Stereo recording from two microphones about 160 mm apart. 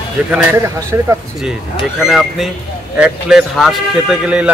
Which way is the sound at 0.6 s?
20° right (ahead or behind).